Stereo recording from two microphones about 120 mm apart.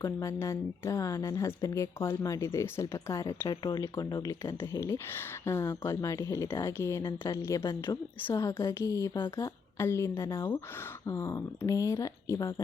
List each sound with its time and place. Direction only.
0.0 s speech: 25° left (ahead or behind)
9.4 s speech: 20° left (ahead or behind)